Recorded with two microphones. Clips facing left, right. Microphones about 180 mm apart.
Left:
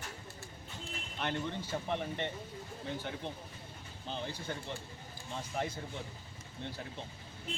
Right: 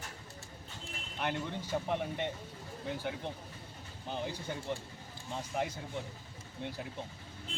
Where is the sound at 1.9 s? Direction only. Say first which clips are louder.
Left 1 dB; 10° right (ahead or behind).